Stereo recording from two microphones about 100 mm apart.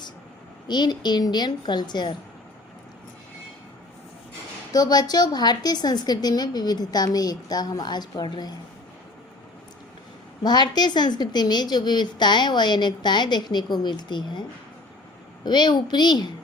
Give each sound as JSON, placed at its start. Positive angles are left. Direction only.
{"t": 0.7, "sound": "a woman's voice", "side_deg": 45}
{"t": 4.7, "sound": "a woman's voice", "side_deg": 40}
{"t": 10.4, "sound": "a woman's voice", "side_deg": 45}
{"t": 15.4, "sound": "a woman's voice", "side_deg": 45}